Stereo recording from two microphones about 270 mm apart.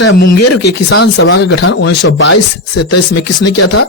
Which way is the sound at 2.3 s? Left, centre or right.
Left.